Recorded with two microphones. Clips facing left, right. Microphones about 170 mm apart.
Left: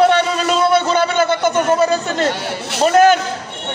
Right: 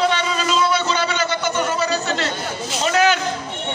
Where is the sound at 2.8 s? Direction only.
50° left (ahead or behind).